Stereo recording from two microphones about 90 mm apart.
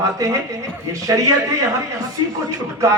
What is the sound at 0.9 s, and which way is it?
Speech, 40° right (ahead or behind).